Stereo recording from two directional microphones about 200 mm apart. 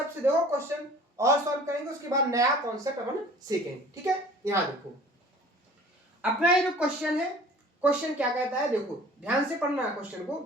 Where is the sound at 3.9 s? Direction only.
15° right (ahead or behind).